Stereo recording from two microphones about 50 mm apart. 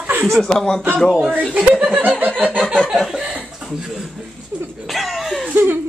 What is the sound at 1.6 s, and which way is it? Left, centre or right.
Chuckle, right.